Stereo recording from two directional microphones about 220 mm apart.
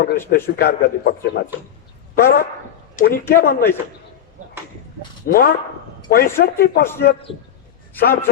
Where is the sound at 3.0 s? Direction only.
40° left (ahead or behind).